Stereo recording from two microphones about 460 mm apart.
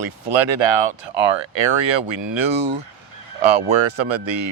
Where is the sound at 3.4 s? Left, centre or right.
Right.